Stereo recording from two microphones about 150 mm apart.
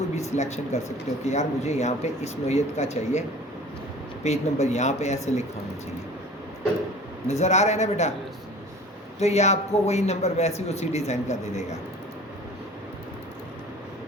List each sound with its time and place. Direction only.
0.2 s a man's voice: 50° left (ahead or behind)
7.3 s a man's voice: 50° left (ahead or behind)
9.1 s a man's voice: 45° left (ahead or behind)